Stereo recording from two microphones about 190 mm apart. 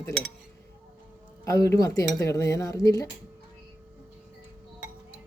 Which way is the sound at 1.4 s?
15° left (ahead or behind).